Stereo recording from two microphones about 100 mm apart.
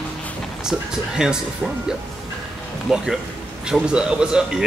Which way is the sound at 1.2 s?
5° right (ahead or behind).